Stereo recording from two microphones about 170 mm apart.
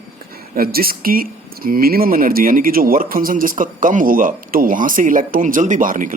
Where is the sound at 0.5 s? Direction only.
60° right (ahead or behind).